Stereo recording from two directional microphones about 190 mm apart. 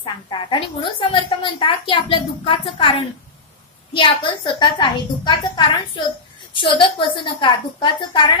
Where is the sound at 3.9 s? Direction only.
25° left (ahead or behind).